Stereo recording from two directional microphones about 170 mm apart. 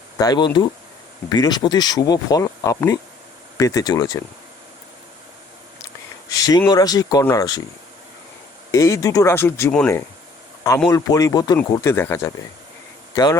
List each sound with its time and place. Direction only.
0.2 s speech: 25° left (ahead or behind)
6.2 s speech: 20° left (ahead or behind)
8.7 s speech: 20° left (ahead or behind)